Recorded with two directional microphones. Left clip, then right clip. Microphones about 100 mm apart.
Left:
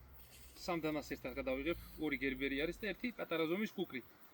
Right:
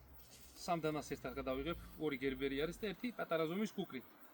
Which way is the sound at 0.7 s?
45° right (ahead or behind).